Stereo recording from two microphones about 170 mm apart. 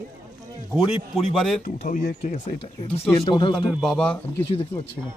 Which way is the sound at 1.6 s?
50° left (ahead or behind).